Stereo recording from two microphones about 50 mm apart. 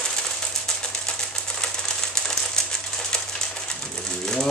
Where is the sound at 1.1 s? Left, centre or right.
Centre.